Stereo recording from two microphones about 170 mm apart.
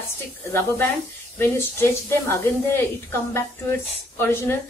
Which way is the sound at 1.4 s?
15° left (ahead or behind).